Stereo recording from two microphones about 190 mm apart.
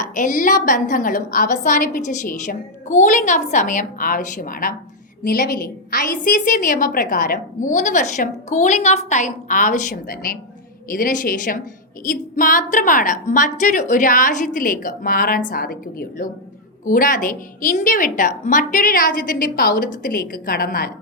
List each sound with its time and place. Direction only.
0.1 s a woman's voice: 45° left (ahead or behind)